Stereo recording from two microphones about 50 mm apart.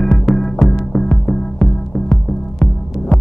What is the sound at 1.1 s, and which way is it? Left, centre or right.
Music, left.